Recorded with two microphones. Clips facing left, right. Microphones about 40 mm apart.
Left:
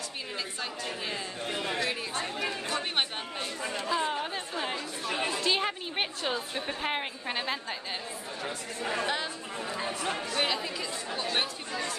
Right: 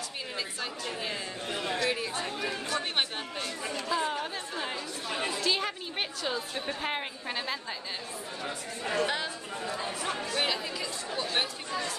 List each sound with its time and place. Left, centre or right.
0.6 s speech: centre
2.2 s speech: centre
3.6 s speech: left
3.9 s chatter: centre
5.4 s a woman's voice: left
9.0 s speech: centre
9.6 s speech: centre